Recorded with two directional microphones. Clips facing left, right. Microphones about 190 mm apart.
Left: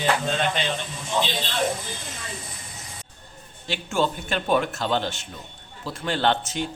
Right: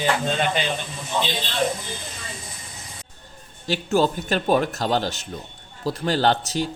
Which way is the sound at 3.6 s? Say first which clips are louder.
Right 4 dB; 40° right (ahead or behind).